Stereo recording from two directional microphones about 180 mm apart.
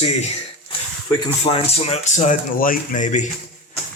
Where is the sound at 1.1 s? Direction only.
25° left (ahead or behind); by 3.2 s 45° left (ahead or behind).